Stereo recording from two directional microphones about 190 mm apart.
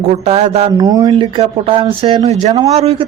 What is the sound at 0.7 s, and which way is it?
Speech, 20° right (ahead or behind).